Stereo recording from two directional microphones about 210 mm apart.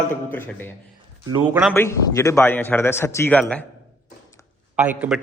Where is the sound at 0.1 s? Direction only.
10° left (ahead or behind).